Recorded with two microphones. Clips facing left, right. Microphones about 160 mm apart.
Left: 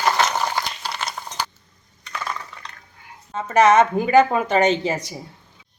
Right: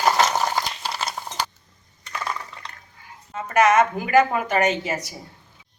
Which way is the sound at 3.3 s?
30° left (ahead or behind).